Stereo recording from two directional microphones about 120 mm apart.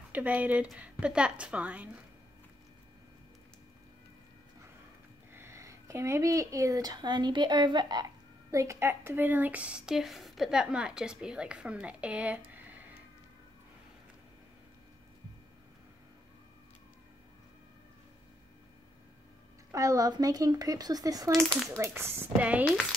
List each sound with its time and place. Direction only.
0.1 s a woman's voice: 15° right (ahead or behind)
5.3 s speech: 20° right (ahead or behind)
19.7 s speech: 30° right (ahead or behind)
21.3 s speech: 5° left (ahead or behind)
21.6 s speech: 25° right (ahead or behind)